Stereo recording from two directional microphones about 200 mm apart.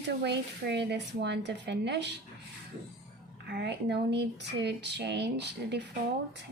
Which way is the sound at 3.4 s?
55° right (ahead or behind).